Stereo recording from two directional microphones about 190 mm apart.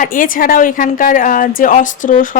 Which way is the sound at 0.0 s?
45° left (ahead or behind).